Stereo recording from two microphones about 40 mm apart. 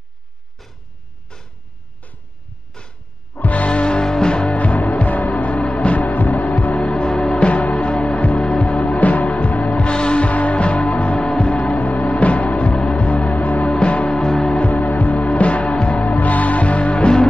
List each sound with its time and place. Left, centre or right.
1.3 s vehicle: left
3.3 s music: left
4.6 s music: left
13.7 s music: left
14.6 s music: left